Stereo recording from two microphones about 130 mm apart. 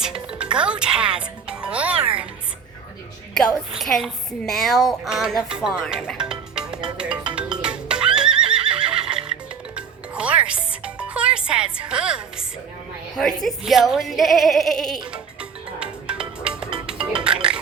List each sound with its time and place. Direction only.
0.0 s speech: 5° right (ahead or behind)
3.8 s speech: centre (ahead or behind)
6.1 s music: 5° right (ahead or behind)
13.1 s speech: 5° left (ahead or behind)
15.1 s music: 5° right (ahead or behind)